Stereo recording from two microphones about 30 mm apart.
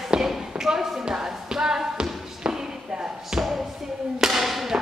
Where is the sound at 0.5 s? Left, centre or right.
Right.